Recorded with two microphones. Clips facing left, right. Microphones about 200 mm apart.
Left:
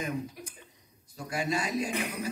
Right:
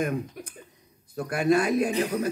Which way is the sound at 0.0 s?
55° right (ahead or behind).